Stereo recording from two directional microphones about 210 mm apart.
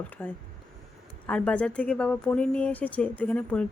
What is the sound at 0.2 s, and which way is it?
Speech, 10° left (ahead or behind).